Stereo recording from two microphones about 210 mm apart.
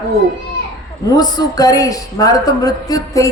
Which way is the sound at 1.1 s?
20° left (ahead or behind).